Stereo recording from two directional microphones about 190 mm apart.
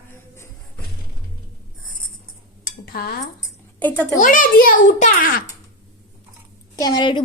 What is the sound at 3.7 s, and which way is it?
Speech, 5° left (ahead or behind).